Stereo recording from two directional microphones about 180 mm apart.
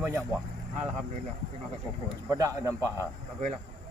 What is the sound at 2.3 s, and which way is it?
Speech, 20° right (ahead or behind).